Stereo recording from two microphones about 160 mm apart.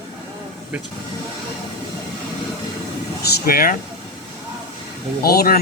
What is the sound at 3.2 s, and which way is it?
Speech, 75° left (ahead or behind).